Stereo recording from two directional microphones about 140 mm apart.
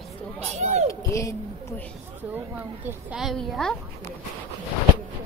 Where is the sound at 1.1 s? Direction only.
20° left (ahead or behind).